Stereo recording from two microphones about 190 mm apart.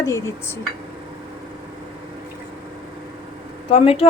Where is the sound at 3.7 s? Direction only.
30° left (ahead or behind).